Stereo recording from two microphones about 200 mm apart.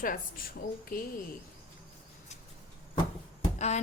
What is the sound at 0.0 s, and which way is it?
A woman's voice, 45° left (ahead or behind).